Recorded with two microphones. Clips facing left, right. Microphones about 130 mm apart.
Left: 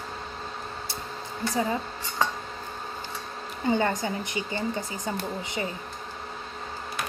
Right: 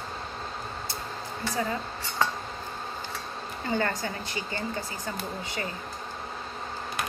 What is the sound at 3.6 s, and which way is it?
Speech, 20° left (ahead or behind).